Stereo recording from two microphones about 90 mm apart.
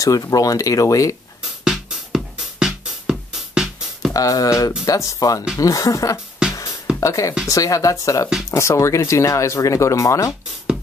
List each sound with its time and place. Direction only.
0.0 s speech: 40° left (ahead or behind)
1.4 s music: 5° right (ahead or behind)
4.1 s speech: 40° left (ahead or behind)